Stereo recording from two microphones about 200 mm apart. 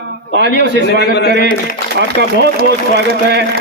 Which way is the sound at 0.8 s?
55° left (ahead or behind).